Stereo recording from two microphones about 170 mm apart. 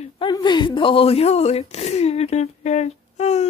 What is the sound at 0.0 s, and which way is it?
Speech, 30° left (ahead or behind).